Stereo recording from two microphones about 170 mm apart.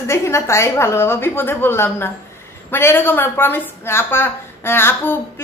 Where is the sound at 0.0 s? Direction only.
15° left (ahead or behind).